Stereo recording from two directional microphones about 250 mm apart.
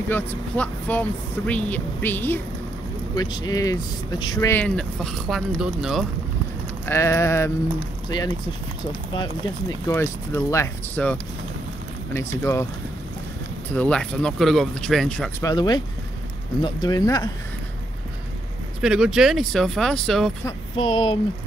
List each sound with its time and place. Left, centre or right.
0.1 s speech: centre
6.9 s speech: centre
13.7 s speech: centre
15.4 s speech: centre
18.8 s speech: centre
20.4 s speech: centre